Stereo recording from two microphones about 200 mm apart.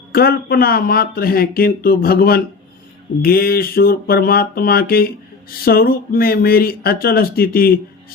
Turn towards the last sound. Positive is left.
turn(degrees=50)  # may be behind; listen again after turning